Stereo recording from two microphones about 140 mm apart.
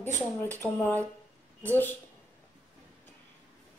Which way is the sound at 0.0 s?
15° left (ahead or behind).